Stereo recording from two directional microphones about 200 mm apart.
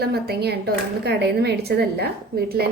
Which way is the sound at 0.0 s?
50° right (ahead or behind).